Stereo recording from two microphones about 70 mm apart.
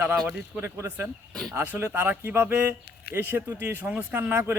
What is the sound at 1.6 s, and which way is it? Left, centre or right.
A man's voice, right.